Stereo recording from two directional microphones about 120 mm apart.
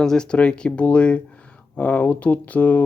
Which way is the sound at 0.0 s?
5° left (ahead or behind).